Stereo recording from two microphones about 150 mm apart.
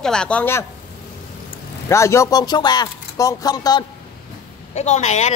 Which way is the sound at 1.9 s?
20° left (ahead or behind).